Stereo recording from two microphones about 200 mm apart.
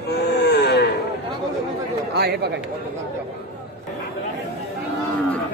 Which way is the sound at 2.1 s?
55° right (ahead or behind).